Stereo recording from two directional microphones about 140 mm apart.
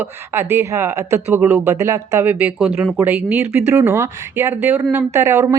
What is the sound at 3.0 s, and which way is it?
Speech, 15° right (ahead or behind).